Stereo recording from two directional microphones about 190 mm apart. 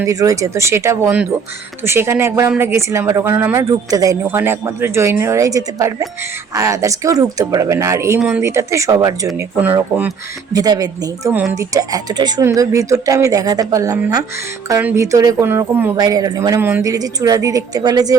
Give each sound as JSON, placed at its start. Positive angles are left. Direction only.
{"t": 0.0, "sound": "speech", "side_deg": -15}
{"t": 10.5, "sound": "speech", "side_deg": -20}